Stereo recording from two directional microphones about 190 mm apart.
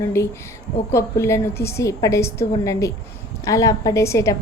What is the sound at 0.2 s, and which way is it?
A woman's voice, 15° left (ahead or behind).